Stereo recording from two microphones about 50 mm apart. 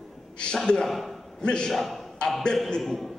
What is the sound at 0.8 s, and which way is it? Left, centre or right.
Speech, centre.